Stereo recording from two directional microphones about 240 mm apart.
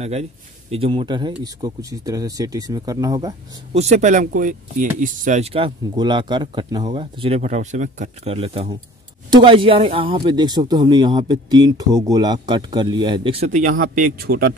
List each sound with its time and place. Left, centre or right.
0.0 s speech: right
3.7 s speech: right